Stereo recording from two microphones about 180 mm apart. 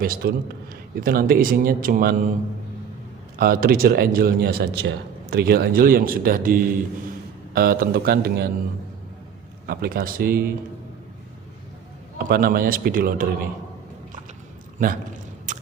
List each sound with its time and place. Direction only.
0.0 s a man's voice: 55° right (ahead or behind)
3.3 s a man's voice: 55° right (ahead or behind)
9.6 s a man's voice: 55° right (ahead or behind)
12.2 s a man's voice: 55° right (ahead or behind)
14.8 s a man's voice: 45° right (ahead or behind)
15.5 s a sound: 45° right (ahead or behind)